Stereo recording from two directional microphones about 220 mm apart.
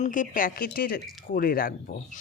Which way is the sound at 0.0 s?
35° left (ahead or behind).